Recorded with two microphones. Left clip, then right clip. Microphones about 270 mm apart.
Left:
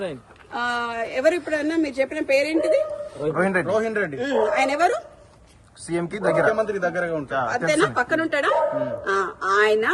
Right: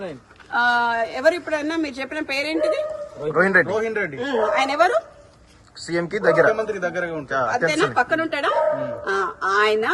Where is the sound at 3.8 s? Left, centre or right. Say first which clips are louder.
Even; left.